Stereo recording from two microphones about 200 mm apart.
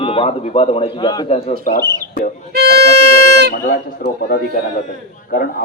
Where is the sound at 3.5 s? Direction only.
50° left (ahead or behind).